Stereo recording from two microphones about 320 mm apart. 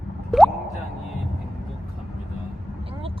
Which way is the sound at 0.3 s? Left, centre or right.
Centre.